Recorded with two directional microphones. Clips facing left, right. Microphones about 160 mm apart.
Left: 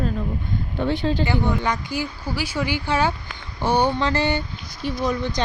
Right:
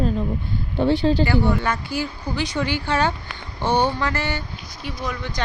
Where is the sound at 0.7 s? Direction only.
35° right (ahead or behind).